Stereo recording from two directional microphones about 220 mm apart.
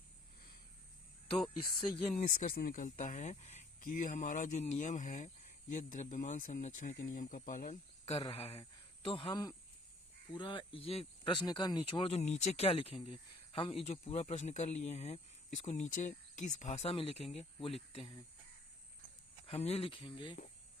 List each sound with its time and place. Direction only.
2.1 s speech: 35° left (ahead or behind)
19.5 s speech: 30° left (ahead or behind)